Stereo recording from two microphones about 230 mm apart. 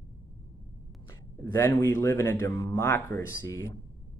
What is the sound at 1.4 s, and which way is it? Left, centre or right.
Speech, centre.